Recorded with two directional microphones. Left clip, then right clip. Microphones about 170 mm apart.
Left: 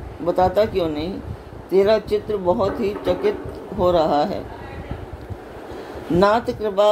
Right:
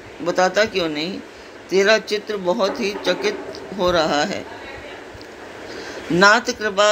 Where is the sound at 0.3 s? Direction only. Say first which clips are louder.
Even; 15° left (ahead or behind).